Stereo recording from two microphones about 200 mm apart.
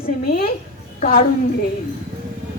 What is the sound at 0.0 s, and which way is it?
Speech, 50° left (ahead or behind).